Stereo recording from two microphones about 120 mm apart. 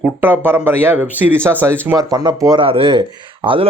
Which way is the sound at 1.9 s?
35° right (ahead or behind).